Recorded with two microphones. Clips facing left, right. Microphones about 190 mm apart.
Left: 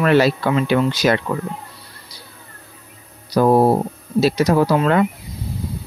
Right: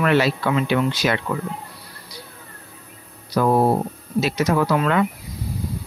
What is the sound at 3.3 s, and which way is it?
Speech, 35° left (ahead or behind).